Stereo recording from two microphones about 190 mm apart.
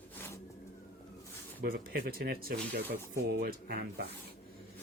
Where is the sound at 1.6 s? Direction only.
55° right (ahead or behind).